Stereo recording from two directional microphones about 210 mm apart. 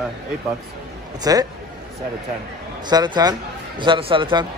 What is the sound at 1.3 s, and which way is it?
Speech, 15° right (ahead or behind).